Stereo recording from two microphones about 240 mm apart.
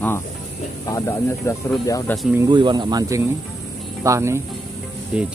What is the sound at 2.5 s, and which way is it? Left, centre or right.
Speech, centre.